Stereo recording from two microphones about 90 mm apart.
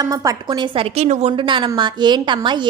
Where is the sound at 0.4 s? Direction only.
60° right (ahead or behind).